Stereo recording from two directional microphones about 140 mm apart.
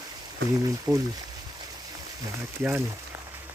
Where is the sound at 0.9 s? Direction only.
30° right (ahead or behind).